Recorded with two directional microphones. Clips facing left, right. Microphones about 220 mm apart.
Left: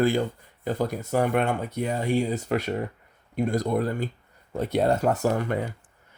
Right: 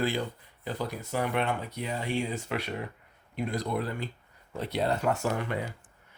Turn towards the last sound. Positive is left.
turn(degrees=40)  # may be behind; listen again after turning